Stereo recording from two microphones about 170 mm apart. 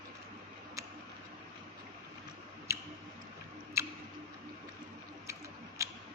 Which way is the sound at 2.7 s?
15° right (ahead or behind).